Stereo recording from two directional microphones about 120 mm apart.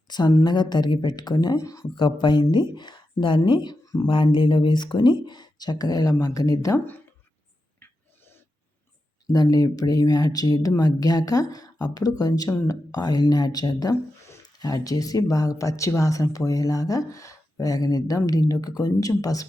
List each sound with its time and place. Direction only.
0.1 s speech: 35° left (ahead or behind)
2.0 s speech: 40° left (ahead or behind)
6.7 s speech: 15° left (ahead or behind)
9.3 s speech: 30° left (ahead or behind)